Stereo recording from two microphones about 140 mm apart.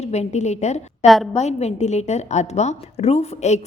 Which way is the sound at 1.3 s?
50° left (ahead or behind).